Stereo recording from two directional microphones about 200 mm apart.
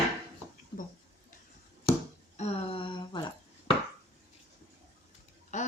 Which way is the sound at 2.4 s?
30° left (ahead or behind).